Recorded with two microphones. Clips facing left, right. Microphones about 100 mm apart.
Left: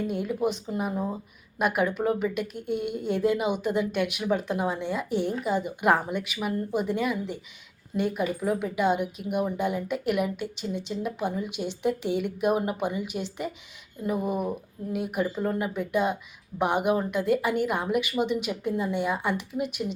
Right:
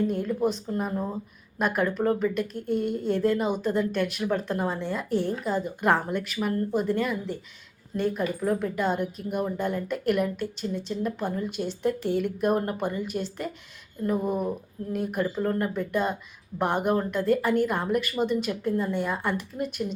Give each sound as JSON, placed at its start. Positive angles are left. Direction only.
{"t": 0.0, "sound": "speech", "side_deg": 10}